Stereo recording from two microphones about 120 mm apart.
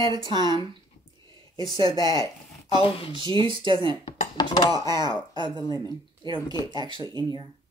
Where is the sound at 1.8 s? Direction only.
30° left (ahead or behind).